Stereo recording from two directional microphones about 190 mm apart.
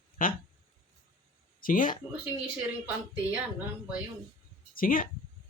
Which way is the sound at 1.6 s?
45° left (ahead or behind).